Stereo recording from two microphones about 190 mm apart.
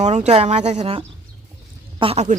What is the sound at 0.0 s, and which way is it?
Speech, 35° right (ahead or behind).